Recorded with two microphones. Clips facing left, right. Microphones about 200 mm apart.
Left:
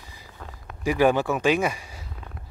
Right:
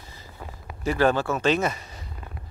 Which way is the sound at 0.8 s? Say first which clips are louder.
Left 2 dB; 15° left (ahead or behind).